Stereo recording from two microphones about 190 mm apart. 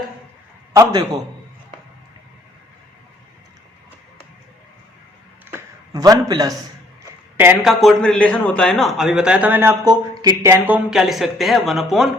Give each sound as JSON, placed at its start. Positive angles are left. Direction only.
{"t": 0.7, "sound": "a man's voice", "side_deg": -15}
{"t": 5.5, "sound": "a sound", "side_deg": -15}
{"t": 7.3, "sound": "a man's voice", "side_deg": -5}